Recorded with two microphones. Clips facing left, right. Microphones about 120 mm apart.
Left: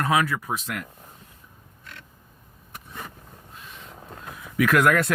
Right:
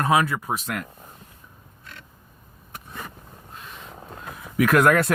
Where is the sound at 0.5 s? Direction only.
45° right (ahead or behind).